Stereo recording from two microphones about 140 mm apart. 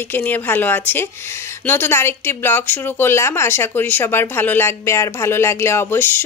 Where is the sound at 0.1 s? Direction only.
15° left (ahead or behind).